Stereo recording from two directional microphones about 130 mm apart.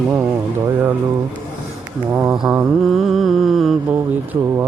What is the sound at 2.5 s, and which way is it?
Mantra, 10° right (ahead or behind).